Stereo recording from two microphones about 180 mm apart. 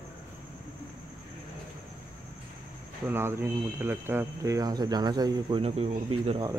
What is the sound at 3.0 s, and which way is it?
Speech, 15° right (ahead or behind).